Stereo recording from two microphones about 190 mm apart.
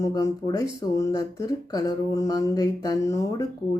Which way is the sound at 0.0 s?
20° left (ahead or behind).